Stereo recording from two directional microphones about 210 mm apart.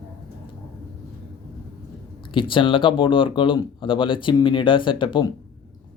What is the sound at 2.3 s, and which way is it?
Speech, 25° left (ahead or behind).